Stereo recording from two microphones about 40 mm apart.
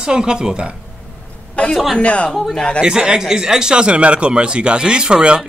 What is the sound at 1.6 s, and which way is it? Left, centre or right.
Speech, left.